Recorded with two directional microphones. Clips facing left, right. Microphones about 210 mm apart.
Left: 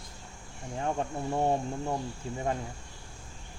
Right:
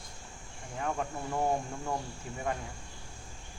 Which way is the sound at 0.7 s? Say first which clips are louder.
Left 3 dB; 30° left (ahead or behind).